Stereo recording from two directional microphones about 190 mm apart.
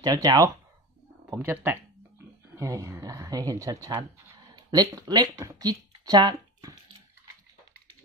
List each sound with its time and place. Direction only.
0.0 s speech: 20° right (ahead or behind)